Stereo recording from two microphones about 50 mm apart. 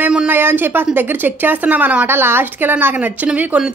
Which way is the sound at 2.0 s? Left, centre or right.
Right.